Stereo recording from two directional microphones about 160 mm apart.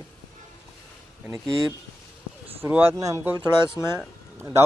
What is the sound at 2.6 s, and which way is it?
Speech, 15° right (ahead or behind).